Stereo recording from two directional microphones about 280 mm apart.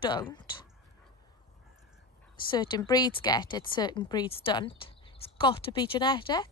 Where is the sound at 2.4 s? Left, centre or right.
Centre.